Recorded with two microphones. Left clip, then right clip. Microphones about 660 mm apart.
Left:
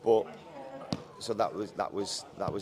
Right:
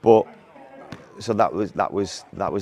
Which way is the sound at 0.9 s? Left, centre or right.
Right.